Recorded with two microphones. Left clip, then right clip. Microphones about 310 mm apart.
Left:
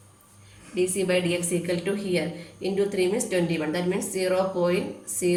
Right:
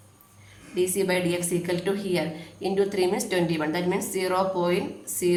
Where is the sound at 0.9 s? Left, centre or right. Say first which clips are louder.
Left 1 dB; centre.